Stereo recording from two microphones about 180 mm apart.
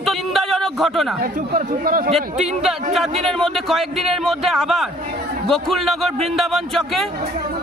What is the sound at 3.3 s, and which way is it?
A man's voice, centre (ahead or behind).